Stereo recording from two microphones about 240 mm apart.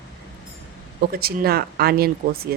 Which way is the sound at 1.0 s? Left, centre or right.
Right.